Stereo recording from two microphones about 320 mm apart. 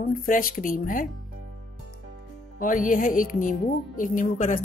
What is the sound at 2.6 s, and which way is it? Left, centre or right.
A woman's voice, left.